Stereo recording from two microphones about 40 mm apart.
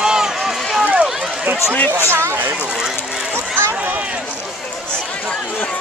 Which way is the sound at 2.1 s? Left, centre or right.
Right.